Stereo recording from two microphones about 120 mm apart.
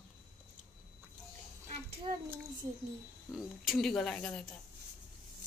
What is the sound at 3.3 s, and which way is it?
Speech, centre (ahead or behind).